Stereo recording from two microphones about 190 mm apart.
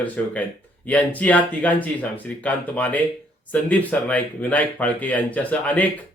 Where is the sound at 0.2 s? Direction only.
5° left (ahead or behind).